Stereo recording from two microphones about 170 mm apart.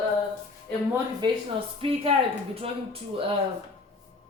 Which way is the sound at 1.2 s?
25° right (ahead or behind).